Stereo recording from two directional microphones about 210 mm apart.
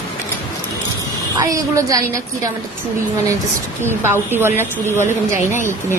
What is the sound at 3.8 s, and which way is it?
A woman's voice, 10° right (ahead or behind).